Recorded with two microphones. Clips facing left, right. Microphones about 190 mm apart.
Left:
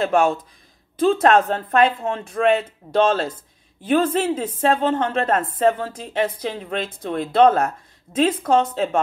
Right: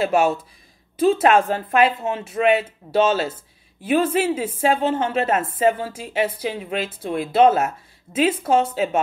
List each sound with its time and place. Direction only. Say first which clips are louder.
0.0 s a woman's voice: even; 5° right (ahead or behind)